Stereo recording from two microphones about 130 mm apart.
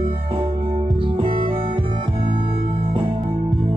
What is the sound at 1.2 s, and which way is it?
Music, 40° right (ahead or behind).